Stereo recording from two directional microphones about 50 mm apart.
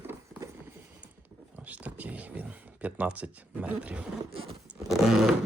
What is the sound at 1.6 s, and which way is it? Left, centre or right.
Speech, right.